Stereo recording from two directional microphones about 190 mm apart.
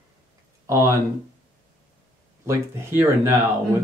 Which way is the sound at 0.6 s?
15° right (ahead or behind).